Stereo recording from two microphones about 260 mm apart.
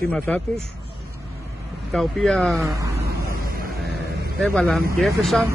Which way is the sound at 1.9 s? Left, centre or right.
Centre.